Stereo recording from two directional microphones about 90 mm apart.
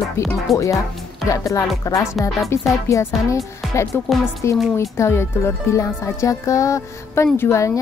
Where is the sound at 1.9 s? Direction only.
35° left (ahead or behind).